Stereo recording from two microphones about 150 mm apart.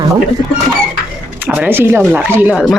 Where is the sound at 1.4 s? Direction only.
10° right (ahead or behind).